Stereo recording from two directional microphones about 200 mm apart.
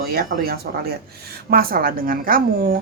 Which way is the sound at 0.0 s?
50° right (ahead or behind).